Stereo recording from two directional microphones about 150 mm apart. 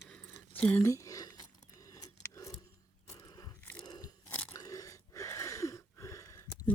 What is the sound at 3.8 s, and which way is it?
Crunch, 25° left (ahead or behind).